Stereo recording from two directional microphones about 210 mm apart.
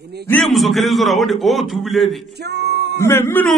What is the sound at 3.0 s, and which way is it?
Speech, 10° left (ahead or behind).